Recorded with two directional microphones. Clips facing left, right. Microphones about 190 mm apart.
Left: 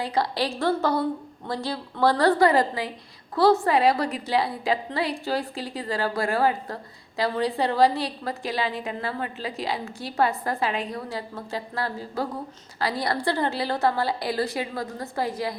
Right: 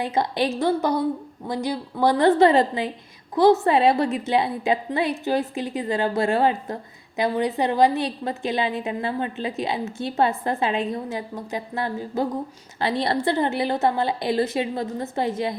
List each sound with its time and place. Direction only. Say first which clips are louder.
0.0 s a woman's voice: right 3 dB; 20° right (ahead or behind)